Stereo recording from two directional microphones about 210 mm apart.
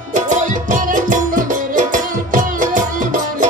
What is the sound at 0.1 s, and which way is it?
Music, 35° right (ahead or behind).